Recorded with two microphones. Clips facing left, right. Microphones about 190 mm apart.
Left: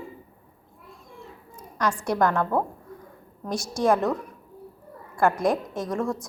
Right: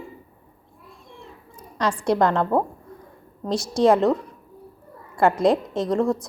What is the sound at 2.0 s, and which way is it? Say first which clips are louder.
Speech: right 4 dB; 20° right (ahead or behind).